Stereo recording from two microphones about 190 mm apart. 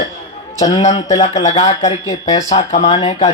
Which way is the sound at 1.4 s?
35° left (ahead or behind).